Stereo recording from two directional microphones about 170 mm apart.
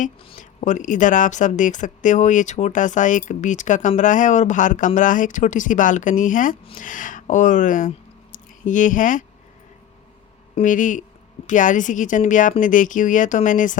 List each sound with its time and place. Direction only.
0.3 s a woman's voice: 45° left (ahead or behind)
10.5 s a woman's voice: 50° left (ahead or behind)